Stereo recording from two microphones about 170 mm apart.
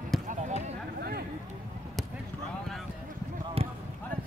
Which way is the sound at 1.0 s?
65° right (ahead or behind).